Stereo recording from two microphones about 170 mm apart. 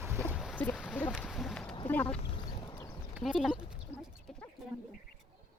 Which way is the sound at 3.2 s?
Centre (ahead or behind).